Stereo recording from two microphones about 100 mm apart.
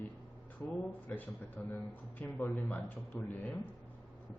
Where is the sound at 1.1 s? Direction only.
20° left (ahead or behind).